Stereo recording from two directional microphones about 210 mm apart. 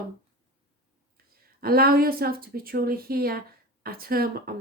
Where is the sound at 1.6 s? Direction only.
45° right (ahead or behind).